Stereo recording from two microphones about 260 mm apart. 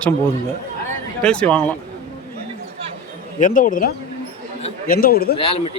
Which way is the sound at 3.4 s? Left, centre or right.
Left.